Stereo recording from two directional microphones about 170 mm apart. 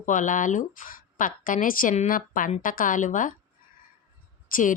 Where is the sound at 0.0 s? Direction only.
50° left (ahead or behind).